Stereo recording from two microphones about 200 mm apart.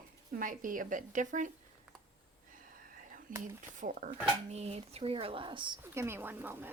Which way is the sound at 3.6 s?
40° right (ahead or behind).